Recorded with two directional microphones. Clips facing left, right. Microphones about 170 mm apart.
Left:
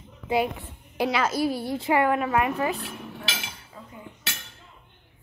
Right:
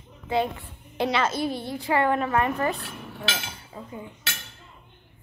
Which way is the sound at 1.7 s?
20° left (ahead or behind).